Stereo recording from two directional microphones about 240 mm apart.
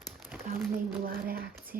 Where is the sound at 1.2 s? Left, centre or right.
Right.